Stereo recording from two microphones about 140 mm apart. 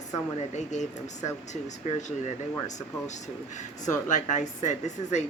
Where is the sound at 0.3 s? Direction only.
55° left (ahead or behind).